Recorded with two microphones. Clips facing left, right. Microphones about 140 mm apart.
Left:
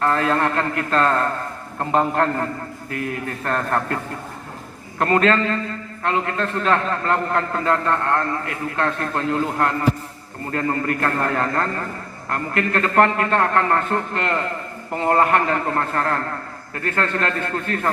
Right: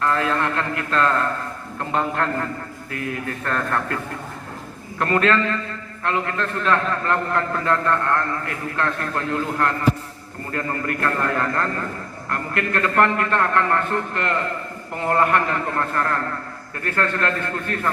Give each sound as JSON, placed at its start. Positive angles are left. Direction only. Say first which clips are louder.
{"t": 0.0, "sound": "a man's voice", "louder": "left 2 dB", "side_deg": 35}
{"t": 4.9, "sound": "a man's voice", "louder": "left 2 dB", "side_deg": 35}